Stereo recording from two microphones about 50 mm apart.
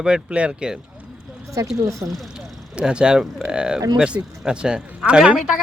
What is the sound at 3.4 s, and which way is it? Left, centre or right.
Speech, centre.